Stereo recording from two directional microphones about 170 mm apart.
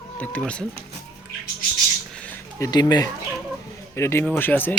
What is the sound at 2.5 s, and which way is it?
Speech, 20° left (ahead or behind).